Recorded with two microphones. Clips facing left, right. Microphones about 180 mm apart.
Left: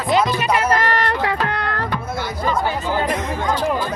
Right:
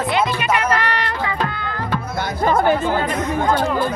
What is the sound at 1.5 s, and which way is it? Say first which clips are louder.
Music: left 4 dB; 75° left (ahead or behind).